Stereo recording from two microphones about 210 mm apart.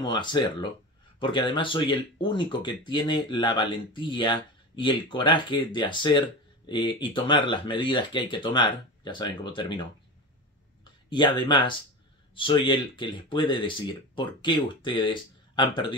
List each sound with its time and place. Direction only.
0.0 s speech: 20° left (ahead or behind)
10.8 s speech: 20° left (ahead or behind)